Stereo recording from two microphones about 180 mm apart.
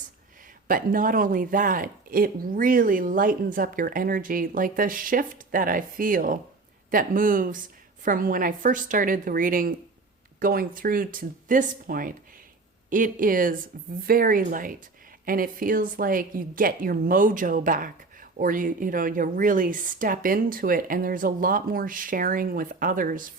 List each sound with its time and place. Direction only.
0.7 s a woman's voice: 50° right (ahead or behind)